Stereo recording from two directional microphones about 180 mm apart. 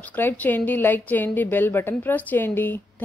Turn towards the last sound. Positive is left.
turn(degrees=10)  # may be behind; listen again after turning